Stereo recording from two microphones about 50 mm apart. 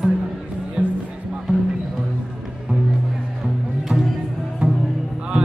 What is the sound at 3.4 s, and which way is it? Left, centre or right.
Music, centre.